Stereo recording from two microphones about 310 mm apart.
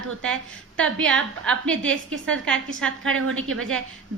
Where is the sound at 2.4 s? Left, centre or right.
Centre.